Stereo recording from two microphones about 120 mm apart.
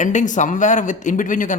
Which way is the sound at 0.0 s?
90° left.